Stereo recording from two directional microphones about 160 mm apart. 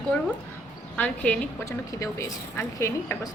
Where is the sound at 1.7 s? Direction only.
20° left (ahead or behind).